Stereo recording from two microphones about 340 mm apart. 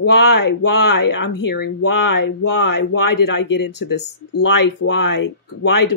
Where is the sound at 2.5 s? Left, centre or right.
Left.